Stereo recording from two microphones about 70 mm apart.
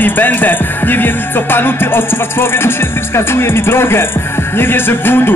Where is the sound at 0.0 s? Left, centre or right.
Left.